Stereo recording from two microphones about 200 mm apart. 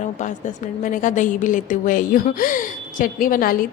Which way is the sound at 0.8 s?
40° left (ahead or behind).